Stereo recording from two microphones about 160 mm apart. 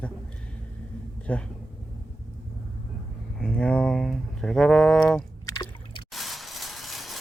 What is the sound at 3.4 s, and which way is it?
Speech, 5° left (ahead or behind).